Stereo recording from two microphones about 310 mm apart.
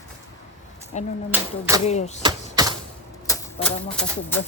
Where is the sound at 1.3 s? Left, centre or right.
Centre.